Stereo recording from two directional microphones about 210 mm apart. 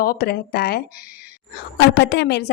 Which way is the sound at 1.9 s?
55° left (ahead or behind).